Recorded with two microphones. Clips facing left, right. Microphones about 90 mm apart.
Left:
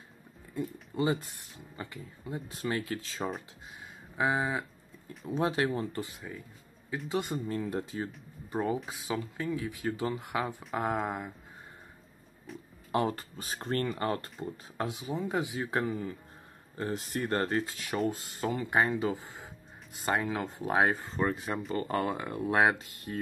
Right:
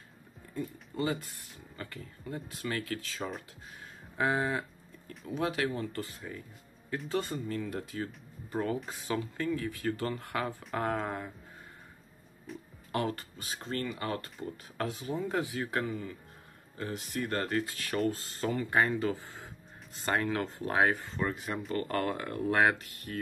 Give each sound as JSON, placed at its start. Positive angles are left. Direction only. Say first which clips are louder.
{"t": 0.9, "sound": "speech", "louder": "left 3 dB", "side_deg": 20}
{"t": 4.2, "sound": "livestock", "louder": "even", "side_deg": 10}
{"t": 5.3, "sound": "speech", "louder": "left 3 dB", "side_deg": 30}
{"t": 7.3, "sound": "speech", "louder": "left 2 dB", "side_deg": 30}
{"t": 8.7, "sound": "speech", "louder": "even", "side_deg": 5}
{"t": 12.5, "sound": "speech", "louder": "right 1 dB", "side_deg": 0}
{"t": 12.9, "sound": "speech", "louder": "left 3 dB", "side_deg": 30}
{"t": 13.6, "sound": "speech", "louder": "left 4 dB", "side_deg": 45}
{"t": 14.4, "sound": "speech", "louder": "left 1 dB", "side_deg": 20}
{"t": 20.9, "sound": "speech", "louder": "left 2 dB", "side_deg": 35}
{"t": 21.7, "sound": "speech", "louder": "even", "side_deg": 20}